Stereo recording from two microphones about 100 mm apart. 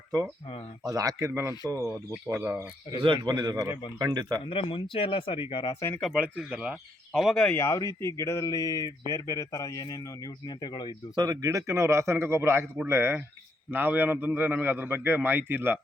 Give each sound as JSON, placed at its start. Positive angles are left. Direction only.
{"t": 0.9, "sound": "a man's voice", "side_deg": -35}
{"t": 1.8, "sound": "speech", "side_deg": 0}
{"t": 2.4, "sound": "a man's voice", "side_deg": -25}
{"t": 3.0, "sound": "a man's voice", "side_deg": -50}
{"t": 3.5, "sound": "speech", "side_deg": -30}
{"t": 3.9, "sound": "a man's voice", "side_deg": -45}
{"t": 4.4, "sound": "speech", "side_deg": 65}
{"t": 5.9, "sound": "speech", "side_deg": 5}
{"t": 6.1, "sound": "speech", "side_deg": -10}
{"t": 7.5, "sound": "speech", "side_deg": 25}
{"t": 10.4, "sound": "speech", "side_deg": 45}
{"t": 11.1, "sound": "a man's voice", "side_deg": -40}